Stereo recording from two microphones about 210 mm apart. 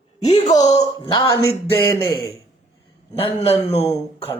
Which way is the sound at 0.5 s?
20° left (ahead or behind).